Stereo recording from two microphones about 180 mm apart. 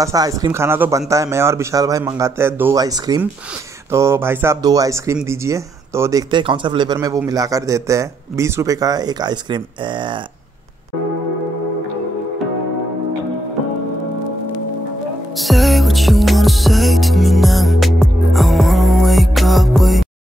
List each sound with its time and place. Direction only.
0.0 s speech: 20° right (ahead or behind)
15.3 s music: centre (ahead or behind)